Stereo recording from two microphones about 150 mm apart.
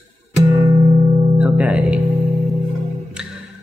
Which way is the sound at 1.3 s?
10° right (ahead or behind).